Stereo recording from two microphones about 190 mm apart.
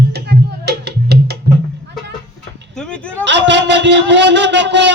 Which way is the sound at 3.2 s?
70° right (ahead or behind).